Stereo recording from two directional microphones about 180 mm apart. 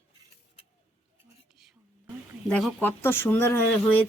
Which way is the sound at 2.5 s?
5° left (ahead or behind).